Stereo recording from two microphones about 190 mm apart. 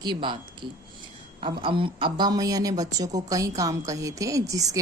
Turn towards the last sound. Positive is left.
turn(degrees=-20)  # may be behind; listen again after turning